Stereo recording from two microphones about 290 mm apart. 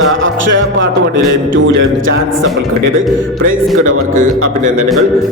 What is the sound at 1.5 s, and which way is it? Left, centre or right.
Speech, right.